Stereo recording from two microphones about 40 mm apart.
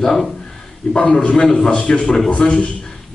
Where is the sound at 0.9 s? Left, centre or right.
Left.